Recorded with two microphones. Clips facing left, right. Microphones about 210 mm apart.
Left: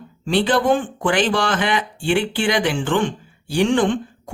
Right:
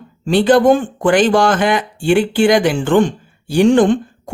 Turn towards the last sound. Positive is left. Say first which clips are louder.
# right 6 dB
turn(degrees=-45)  # may be behind; listen again after turning